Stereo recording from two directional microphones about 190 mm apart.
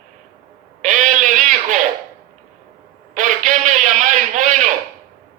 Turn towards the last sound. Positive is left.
turn(degrees=-40)  # may be behind; listen again after turning